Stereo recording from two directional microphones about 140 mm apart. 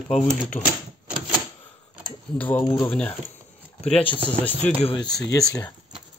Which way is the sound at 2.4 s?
10° left (ahead or behind).